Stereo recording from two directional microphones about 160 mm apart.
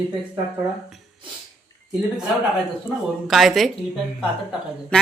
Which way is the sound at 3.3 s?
Centre (ahead or behind).